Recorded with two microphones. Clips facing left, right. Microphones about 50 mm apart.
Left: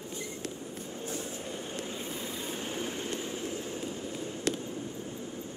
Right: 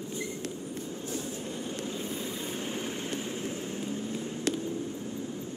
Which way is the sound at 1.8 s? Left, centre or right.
Centre.